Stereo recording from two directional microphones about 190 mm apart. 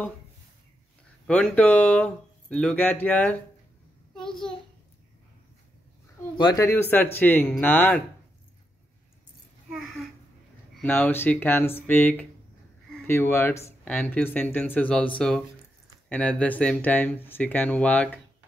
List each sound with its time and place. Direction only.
1.2 s speech: 5° left (ahead or behind)
6.3 s speech: 20° left (ahead or behind)
9.7 s a sound: 5° right (ahead or behind)
10.8 s speech: 10° left (ahead or behind)